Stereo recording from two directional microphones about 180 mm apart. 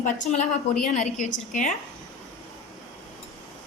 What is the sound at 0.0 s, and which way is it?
A woman's voice, 40° left (ahead or behind).